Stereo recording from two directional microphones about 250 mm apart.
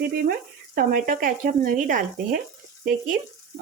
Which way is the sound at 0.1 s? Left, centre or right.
Right.